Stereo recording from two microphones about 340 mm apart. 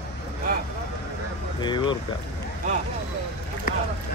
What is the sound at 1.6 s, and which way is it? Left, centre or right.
Speech, centre.